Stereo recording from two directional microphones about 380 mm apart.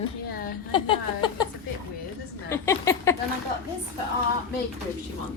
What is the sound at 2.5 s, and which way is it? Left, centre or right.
Speech, centre.